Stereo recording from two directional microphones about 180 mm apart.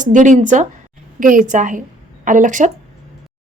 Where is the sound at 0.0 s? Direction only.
45° right (ahead or behind).